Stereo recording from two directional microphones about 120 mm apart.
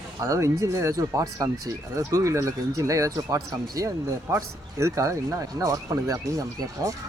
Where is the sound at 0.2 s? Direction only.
25° right (ahead or behind).